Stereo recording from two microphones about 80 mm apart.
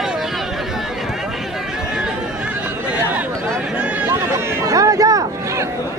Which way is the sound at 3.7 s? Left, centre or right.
Centre.